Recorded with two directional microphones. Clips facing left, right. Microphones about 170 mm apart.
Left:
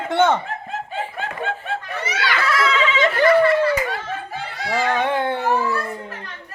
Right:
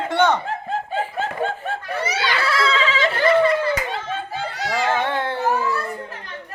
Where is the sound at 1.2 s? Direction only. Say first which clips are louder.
Right 3 dB; 40° right (ahead or behind).